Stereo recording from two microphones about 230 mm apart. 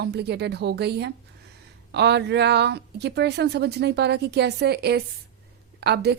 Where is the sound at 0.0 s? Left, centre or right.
Right.